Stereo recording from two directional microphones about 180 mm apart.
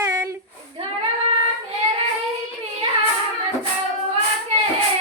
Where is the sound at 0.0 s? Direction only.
15° right (ahead or behind).